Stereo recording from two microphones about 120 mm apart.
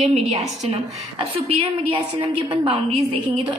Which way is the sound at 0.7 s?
55° right (ahead or behind).